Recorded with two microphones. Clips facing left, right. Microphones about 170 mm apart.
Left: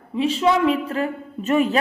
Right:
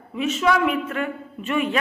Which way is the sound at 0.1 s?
30° left (ahead or behind).